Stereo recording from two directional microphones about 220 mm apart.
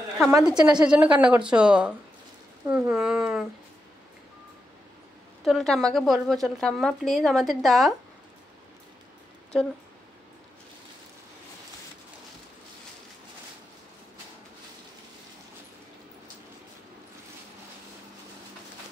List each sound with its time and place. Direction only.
0.2 s speech: 5° right (ahead or behind)
5.4 s speech: centre (ahead or behind)